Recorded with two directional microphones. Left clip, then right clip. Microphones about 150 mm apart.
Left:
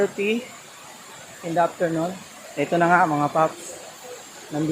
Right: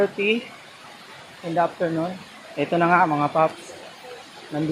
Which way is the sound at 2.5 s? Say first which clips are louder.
Even; 10° left (ahead or behind).